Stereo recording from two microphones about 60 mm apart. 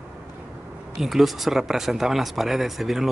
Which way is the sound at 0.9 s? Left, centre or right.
Centre.